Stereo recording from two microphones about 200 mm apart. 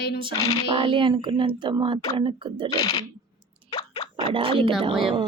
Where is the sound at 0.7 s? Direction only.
25° right (ahead or behind).